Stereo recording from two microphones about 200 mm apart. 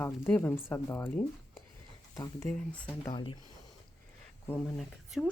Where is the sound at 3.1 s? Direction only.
25° left (ahead or behind).